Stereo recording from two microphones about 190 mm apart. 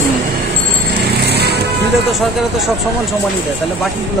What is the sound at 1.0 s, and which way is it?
Music, 60° right (ahead or behind).